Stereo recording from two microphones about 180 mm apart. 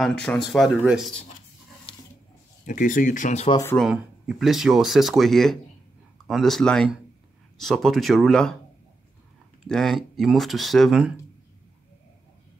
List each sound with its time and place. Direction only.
0.0 s speech: 5° left (ahead or behind)
2.6 s speech: 50° left (ahead or behind)
3.6 s speech: centre (ahead or behind)
9.7 s speech: centre (ahead or behind)